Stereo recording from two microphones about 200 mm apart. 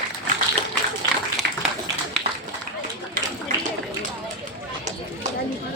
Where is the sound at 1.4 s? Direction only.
55° right (ahead or behind).